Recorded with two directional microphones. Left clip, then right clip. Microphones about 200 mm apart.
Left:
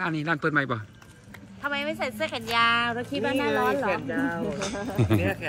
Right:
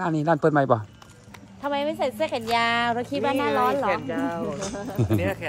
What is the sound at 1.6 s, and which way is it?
A woman's voice, 50° right (ahead or behind).